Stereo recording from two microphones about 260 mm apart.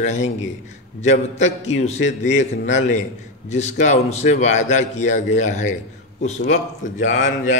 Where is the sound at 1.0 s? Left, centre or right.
Left.